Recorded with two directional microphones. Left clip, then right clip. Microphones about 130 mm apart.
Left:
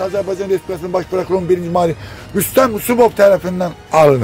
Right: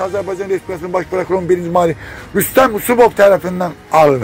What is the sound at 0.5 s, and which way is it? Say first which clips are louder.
Speech: right 1 dB; 30° left (ahead or behind).